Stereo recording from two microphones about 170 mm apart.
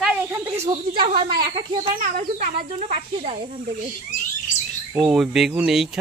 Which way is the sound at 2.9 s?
40° right (ahead or behind).